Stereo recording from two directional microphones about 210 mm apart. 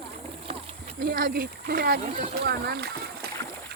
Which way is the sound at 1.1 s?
45° right (ahead or behind).